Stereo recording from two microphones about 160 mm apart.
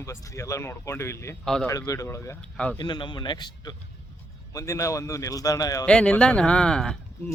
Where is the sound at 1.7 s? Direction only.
20° left (ahead or behind).